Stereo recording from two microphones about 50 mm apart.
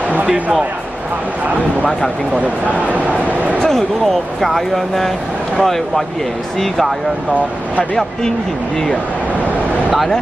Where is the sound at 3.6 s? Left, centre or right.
Centre.